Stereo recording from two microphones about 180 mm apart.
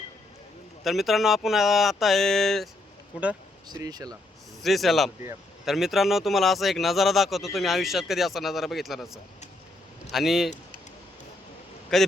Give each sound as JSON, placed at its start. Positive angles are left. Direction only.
{"t": 0.9, "sound": "speech", "side_deg": 0}
{"t": 3.7, "sound": "speech", "side_deg": -20}
{"t": 4.6, "sound": "speech", "side_deg": 0}
{"t": 11.9, "sound": "speech", "side_deg": 0}